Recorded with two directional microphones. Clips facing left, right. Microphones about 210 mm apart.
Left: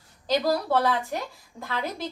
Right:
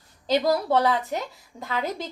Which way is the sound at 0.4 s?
20° right (ahead or behind).